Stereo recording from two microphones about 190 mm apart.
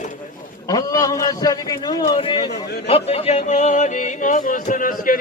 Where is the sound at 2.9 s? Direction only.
30° left (ahead or behind).